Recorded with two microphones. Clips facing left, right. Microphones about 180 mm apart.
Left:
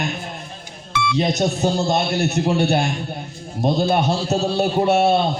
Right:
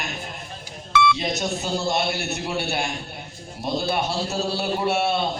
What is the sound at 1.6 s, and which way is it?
A man's voice, 40° left (ahead or behind).